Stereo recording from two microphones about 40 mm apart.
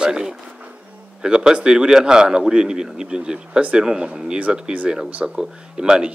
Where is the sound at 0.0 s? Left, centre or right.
Centre.